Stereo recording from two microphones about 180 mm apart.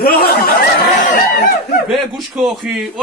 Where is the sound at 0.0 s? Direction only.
55° left (ahead or behind).